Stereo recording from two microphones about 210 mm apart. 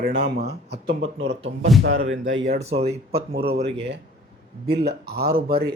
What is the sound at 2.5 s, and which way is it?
Speech, 30° right (ahead or behind).